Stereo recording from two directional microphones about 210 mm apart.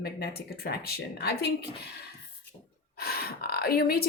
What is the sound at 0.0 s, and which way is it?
A woman's voice, 50° left (ahead or behind).